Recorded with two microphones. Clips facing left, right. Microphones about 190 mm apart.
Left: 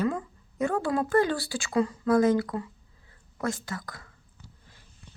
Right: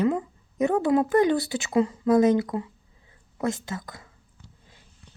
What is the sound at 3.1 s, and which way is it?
Whispering, 20° right (ahead or behind).